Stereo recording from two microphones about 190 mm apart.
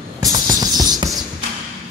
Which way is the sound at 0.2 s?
20° right (ahead or behind).